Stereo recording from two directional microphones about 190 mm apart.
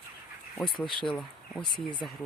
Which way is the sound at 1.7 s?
25° left (ahead or behind).